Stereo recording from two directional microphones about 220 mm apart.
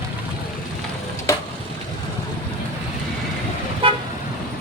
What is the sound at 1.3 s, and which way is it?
Stir, 15° left (ahead or behind).